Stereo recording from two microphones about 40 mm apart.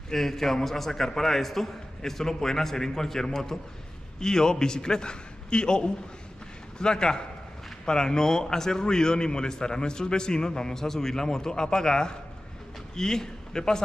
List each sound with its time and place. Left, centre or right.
0.1 s a man's voice: centre